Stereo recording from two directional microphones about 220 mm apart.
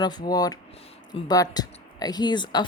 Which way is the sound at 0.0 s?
20° left (ahead or behind).